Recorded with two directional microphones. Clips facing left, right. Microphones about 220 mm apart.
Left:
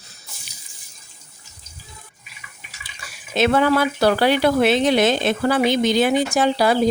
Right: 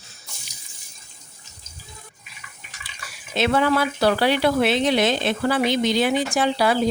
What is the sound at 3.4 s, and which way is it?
Speech, 45° left (ahead or behind).